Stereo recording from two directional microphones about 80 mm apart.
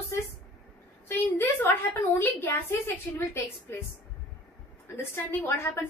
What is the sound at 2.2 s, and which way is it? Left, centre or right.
A woman's voice, left.